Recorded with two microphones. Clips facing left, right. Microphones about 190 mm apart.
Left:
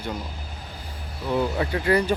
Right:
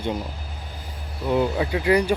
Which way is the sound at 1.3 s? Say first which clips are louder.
Right 2 dB; 15° right (ahead or behind).